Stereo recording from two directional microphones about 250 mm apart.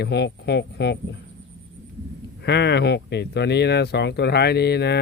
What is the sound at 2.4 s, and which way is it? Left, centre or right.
Speech, left.